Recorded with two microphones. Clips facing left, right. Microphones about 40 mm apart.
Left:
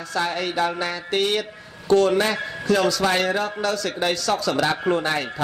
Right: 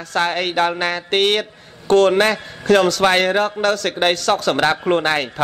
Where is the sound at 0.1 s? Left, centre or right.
Right.